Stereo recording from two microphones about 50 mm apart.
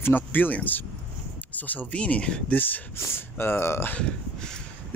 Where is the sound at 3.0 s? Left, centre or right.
Left.